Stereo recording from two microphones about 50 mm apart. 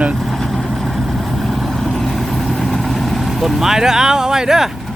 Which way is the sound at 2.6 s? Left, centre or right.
Centre.